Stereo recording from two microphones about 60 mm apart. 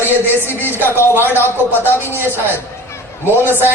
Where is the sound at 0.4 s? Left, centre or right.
Left.